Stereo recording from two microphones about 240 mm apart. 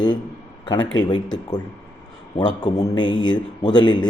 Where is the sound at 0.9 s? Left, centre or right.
Centre.